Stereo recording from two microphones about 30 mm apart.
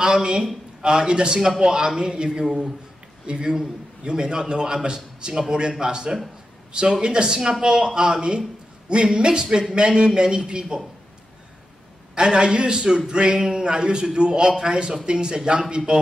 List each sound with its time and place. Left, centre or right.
0.0 s a man's voice: right
9.9 s speech: right
12.2 s speech: right